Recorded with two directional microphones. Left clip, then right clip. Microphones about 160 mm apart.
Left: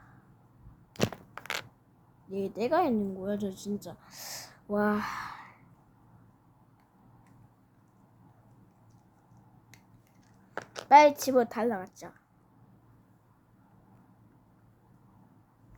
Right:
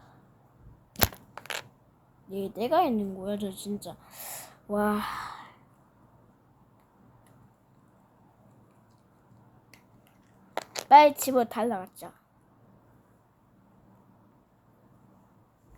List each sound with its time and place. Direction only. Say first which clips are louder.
0.9 s crushing: right 4 dB; 5° left (ahead or behind)
1.4 s coin: even; 15° left (ahead or behind)
2.3 s a woman's voice: even; 25° right (ahead or behind)
2.6 s a woman's voice: right 3 dB; centre (ahead or behind)
10.5 s a sound: right 5 dB; 30° right (ahead or behind)
10.8 s a sound: right 2 dB; centre (ahead or behind)
11.2 s a woman's voice: even; 5° left (ahead or behind)